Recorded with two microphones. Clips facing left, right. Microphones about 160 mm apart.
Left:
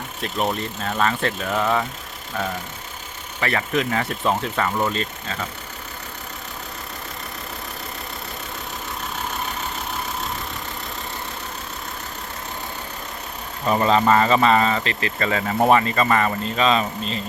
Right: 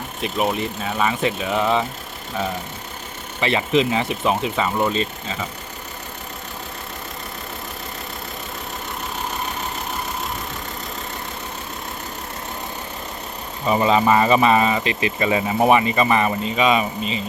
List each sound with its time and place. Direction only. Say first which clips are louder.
0.2 s speech: right 2 dB; 5° right (ahead or behind)
3.4 s speech: right 4 dB; 20° right (ahead or behind)
13.7 s speech: right 1 dB; 5° right (ahead or behind)
16.4 s speech: right 1 dB; 5° right (ahead or behind)